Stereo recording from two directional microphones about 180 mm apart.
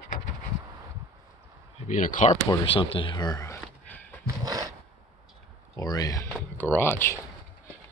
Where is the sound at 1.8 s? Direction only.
45° left (ahead or behind).